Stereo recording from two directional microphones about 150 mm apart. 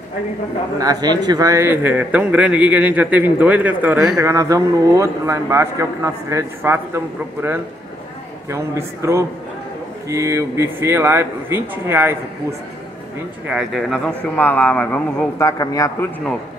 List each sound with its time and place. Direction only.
0.7 s a man's voice: 25° right (ahead or behind); by 4.2 s 5° right (ahead or behind)
4.2 s a man's voice: 20° right (ahead or behind)
8.5 s a man's voice: 20° right (ahead or behind)
13.5 s speech: centre (ahead or behind)
15.4 s speech: 25° left (ahead or behind)